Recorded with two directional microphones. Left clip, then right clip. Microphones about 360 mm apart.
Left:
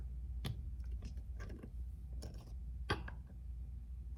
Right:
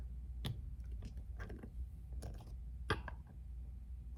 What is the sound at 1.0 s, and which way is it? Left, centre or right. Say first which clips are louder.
Vehicle: right 2 dB; centre.